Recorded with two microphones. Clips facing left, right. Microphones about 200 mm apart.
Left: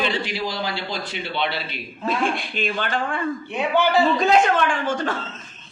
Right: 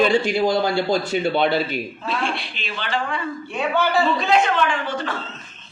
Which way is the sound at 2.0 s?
45° left (ahead or behind).